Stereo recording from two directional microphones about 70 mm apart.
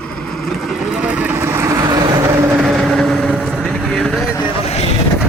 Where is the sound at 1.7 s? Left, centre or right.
Right.